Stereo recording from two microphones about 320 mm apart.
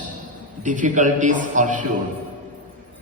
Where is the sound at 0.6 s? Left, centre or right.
Right.